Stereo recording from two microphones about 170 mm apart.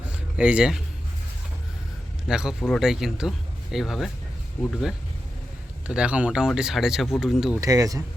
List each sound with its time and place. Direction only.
0.3 s speech: 5° right (ahead or behind)
2.2 s speech: 5° right (ahead or behind)
5.9 s speech: 5° right (ahead or behind)
7.6 s speech: 20° right (ahead or behind)